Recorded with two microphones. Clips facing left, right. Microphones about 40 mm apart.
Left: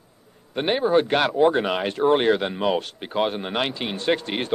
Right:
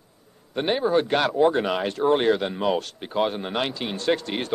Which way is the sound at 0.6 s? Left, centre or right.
Left.